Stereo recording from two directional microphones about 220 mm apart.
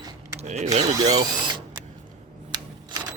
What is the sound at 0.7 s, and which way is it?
Speech, 20° right (ahead or behind).